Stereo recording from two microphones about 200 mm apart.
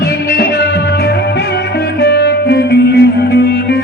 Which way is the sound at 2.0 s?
55° left (ahead or behind).